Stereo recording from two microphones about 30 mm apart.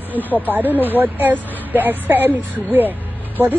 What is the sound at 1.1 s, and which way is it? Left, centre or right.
Speech, right.